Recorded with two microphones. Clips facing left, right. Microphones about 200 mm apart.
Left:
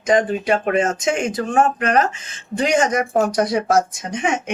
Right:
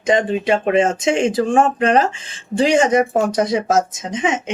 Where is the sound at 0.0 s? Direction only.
25° right (ahead or behind).